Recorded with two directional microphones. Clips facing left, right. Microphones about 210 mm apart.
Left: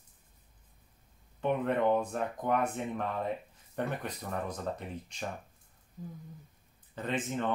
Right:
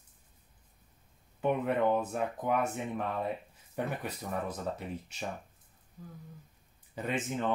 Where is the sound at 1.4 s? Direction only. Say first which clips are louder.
Even; 5° right (ahead or behind).